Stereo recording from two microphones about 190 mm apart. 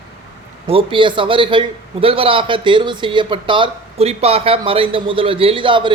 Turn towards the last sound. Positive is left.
turn(degrees=-25)  # may be behind; listen again after turning